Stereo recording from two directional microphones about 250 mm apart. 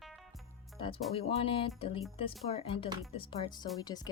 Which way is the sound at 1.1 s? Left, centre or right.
Left.